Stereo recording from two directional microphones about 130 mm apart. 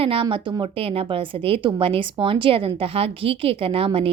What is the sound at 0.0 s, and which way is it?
Speech, 45° right (ahead or behind).